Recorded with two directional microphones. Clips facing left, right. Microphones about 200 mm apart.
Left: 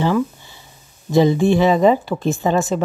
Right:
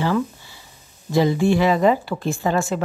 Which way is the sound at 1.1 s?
20° left (ahead or behind).